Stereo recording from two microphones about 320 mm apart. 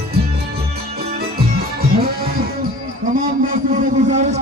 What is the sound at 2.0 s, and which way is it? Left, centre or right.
Music, right.